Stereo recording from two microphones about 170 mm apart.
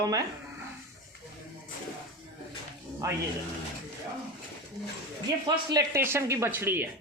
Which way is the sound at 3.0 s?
20° right (ahead or behind).